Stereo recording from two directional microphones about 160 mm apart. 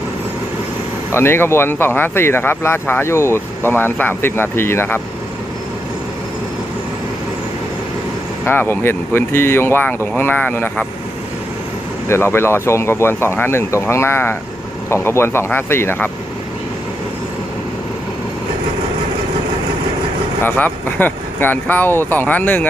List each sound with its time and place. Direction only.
1.1 s speech: 15° left (ahead or behind)
8.5 s speech: 15° left (ahead or behind)
12.1 s speech: 15° left (ahead or behind)
20.4 s speech: 10° left (ahead or behind)